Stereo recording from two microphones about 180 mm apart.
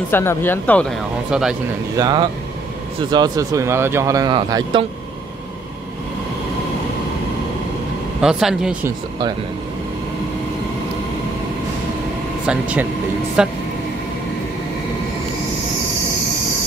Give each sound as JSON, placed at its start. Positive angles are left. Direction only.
{"t": 0.1, "sound": "speech", "side_deg": 10}
{"t": 1.3, "sound": "speech", "side_deg": -5}
{"t": 2.0, "sound": "speech", "side_deg": -25}
{"t": 8.2, "sound": "speech", "side_deg": -5}
{"t": 12.4, "sound": "speech", "side_deg": -5}